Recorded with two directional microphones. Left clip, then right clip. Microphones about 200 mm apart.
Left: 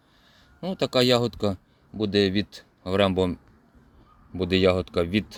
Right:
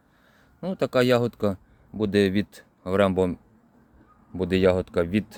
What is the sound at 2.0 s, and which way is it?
Speech, 10° right (ahead or behind).